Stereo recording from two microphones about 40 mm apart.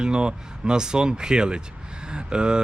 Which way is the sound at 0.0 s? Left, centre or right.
Right.